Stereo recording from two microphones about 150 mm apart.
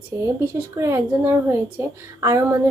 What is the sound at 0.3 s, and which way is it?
A woman's voice, 20° right (ahead or behind).